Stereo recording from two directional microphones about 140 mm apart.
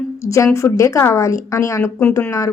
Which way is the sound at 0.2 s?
20° left (ahead or behind).